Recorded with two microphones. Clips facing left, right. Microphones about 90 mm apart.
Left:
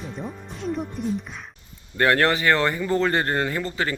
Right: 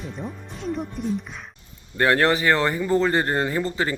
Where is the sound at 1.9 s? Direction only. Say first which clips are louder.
Right 1 dB; 20° right (ahead or behind).